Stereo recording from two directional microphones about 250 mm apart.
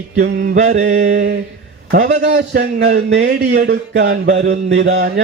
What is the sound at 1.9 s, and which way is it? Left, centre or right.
Music, right.